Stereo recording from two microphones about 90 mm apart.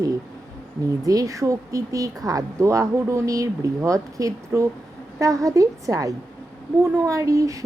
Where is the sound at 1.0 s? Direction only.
40° right (ahead or behind).